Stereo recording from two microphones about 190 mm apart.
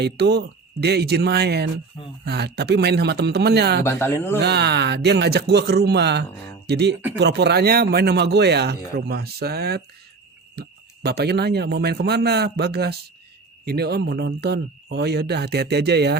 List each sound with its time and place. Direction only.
0.0 s a man's voice: 60° right (ahead or behind)
3.8 s speech: 10° left (ahead or behind)
4.4 s a man's voice: 60° right (ahead or behind)